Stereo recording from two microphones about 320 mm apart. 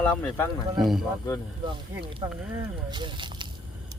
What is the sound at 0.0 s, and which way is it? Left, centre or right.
Speech, centre.